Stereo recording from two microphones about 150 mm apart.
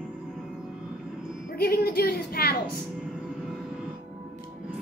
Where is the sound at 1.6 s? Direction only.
90° left.